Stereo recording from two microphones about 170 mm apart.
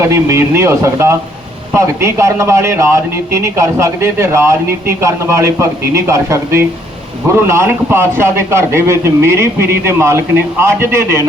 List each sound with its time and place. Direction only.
0.0 s a man's voice: 15° right (ahead or behind)